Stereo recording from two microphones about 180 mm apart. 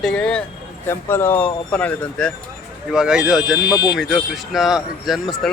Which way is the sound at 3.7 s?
25° left (ahead or behind).